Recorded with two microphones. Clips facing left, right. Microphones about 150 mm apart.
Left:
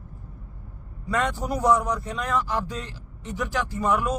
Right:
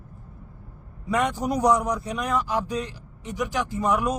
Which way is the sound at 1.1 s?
15° right (ahead or behind).